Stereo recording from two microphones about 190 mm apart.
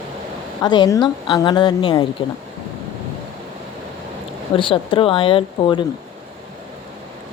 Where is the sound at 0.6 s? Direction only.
20° left (ahead or behind).